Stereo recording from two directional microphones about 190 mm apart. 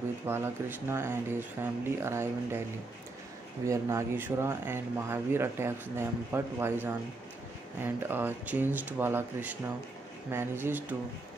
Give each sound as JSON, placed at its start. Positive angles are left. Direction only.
{"t": 0.3, "sound": "speech", "side_deg": -10}
{"t": 3.6, "sound": "speech", "side_deg": -15}